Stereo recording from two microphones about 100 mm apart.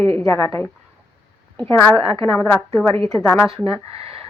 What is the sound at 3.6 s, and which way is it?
Speech, 75° right (ahead or behind).